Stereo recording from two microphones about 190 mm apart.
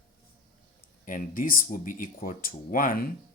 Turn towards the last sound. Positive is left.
turn(degrees=50)  # may be behind; listen again after turning